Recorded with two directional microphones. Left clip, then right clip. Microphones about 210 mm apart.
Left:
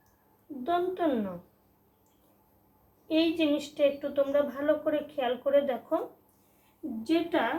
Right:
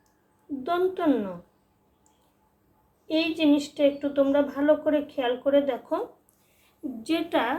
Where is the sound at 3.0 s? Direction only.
40° right (ahead or behind).